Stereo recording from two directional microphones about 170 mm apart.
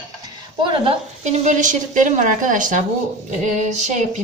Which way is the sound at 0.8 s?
45° right (ahead or behind).